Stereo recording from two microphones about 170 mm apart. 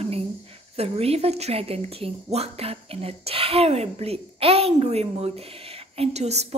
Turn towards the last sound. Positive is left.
turn(degrees=-40)  # may be behind; listen again after turning